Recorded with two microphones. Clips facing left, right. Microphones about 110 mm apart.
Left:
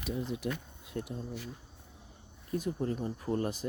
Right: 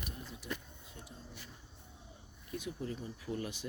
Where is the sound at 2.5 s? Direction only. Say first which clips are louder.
Left 8 dB; 40° left (ahead or behind).